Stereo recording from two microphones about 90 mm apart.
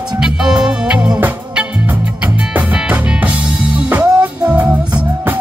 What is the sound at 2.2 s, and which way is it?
Music, 15° right (ahead or behind).